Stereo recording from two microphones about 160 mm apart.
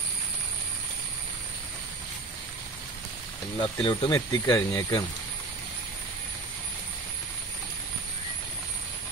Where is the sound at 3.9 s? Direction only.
25° left (ahead or behind).